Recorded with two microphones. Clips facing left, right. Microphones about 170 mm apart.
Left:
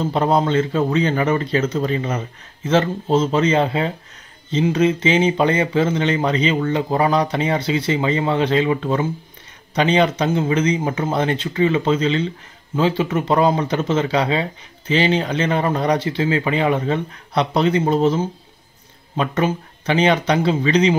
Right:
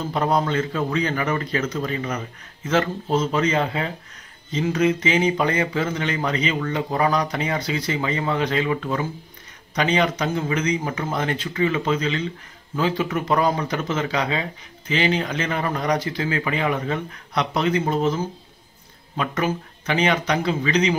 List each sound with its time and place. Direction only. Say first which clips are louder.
0.1 s speech: left 3 dB; 30° left (ahead or behind)